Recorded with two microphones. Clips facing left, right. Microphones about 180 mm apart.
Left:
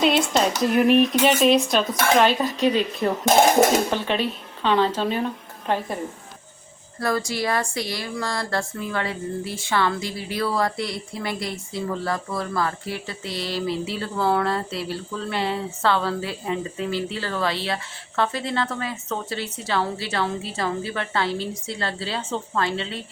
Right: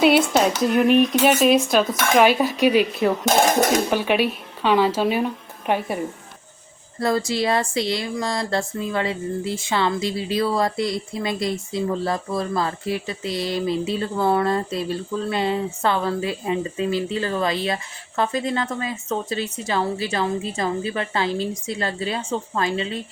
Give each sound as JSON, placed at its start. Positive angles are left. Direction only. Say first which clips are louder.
{"t": 0.0, "sound": "a woman's voice", "louder": "right 3 dB", "side_deg": -5}
{"t": 7.0, "sound": "speech", "louder": "right 3 dB", "side_deg": -25}